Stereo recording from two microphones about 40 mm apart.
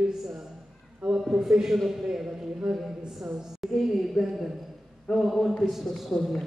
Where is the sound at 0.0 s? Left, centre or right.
Centre.